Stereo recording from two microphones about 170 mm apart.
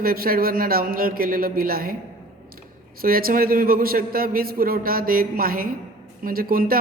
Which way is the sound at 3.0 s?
60° right (ahead or behind).